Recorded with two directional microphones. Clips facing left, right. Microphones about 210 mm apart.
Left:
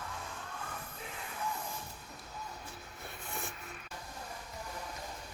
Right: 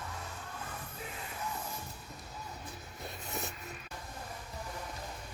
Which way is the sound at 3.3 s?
40° right (ahead or behind).